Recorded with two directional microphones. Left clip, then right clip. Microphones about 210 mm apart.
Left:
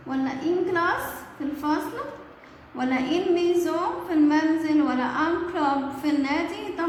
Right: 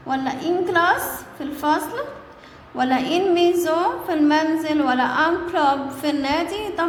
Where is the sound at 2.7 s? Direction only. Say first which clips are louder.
Right 5 dB; 35° right (ahead or behind).